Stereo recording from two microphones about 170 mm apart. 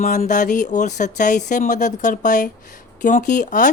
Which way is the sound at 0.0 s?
50° left (ahead or behind).